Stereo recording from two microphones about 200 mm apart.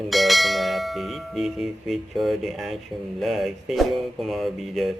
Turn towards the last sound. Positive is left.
turn(degrees=0)  # may be behind; listen again after turning